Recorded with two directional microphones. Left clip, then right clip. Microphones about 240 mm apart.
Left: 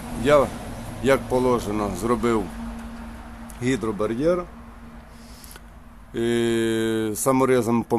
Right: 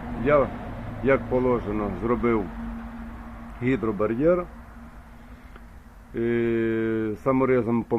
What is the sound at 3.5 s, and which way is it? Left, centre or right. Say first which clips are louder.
Speech: even; centre.